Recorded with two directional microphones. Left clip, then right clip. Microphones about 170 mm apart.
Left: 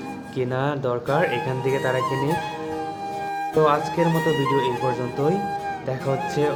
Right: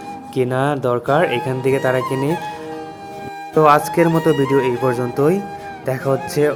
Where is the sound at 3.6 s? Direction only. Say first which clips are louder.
Right 7 dB; 45° right (ahead or behind).